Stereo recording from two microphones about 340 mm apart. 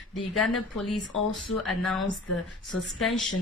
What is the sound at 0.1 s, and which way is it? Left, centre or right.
Speech, centre.